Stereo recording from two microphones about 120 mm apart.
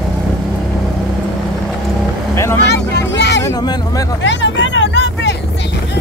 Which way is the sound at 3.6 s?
35° left (ahead or behind).